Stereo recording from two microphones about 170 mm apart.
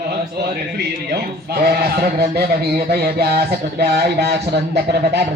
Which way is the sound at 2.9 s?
70° right (ahead or behind).